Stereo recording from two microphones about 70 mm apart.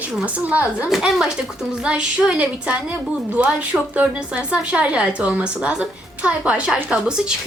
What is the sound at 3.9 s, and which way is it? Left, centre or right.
Speech, centre.